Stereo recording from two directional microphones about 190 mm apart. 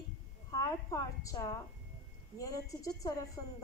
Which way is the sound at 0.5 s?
15° left (ahead or behind).